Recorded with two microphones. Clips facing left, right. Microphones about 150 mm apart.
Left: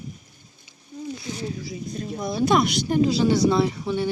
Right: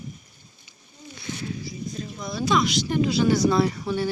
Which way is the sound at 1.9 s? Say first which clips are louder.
Left 7 dB; 55° left (ahead or behind).